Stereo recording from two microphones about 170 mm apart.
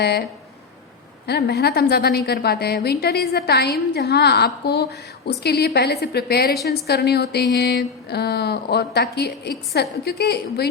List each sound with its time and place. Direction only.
0.0 s a woman's voice: 75° left (ahead or behind)
1.3 s a woman's voice: 75° left (ahead or behind)